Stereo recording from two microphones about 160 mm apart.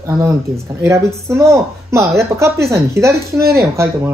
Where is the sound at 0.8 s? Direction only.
15° right (ahead or behind).